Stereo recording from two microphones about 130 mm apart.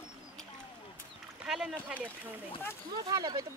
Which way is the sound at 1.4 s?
5° right (ahead or behind).